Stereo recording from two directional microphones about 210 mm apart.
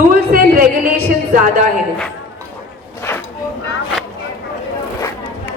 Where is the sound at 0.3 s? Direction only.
45° right (ahead or behind).